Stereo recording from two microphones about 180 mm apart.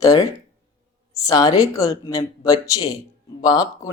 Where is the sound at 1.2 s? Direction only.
20° left (ahead or behind).